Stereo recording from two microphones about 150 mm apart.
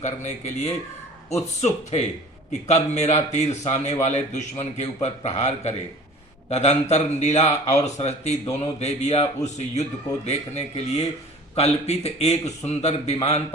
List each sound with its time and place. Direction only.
0.0 s speech: 50° left (ahead or behind)